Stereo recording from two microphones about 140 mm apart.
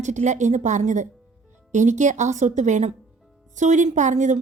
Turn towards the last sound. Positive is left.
turn(degrees=-60)  # may be behind; listen again after turning